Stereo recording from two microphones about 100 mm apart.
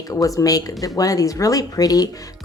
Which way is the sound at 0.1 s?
35° left (ahead or behind).